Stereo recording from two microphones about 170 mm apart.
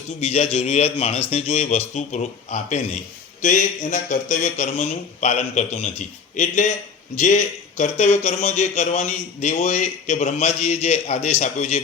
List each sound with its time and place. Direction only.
0.2 s a man's voice: 40° left (ahead or behind)